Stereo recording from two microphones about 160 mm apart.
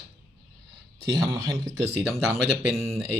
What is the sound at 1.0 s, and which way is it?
Speech, 25° right (ahead or behind).